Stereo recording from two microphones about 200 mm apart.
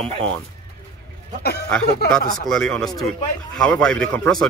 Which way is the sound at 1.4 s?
55° left (ahead or behind).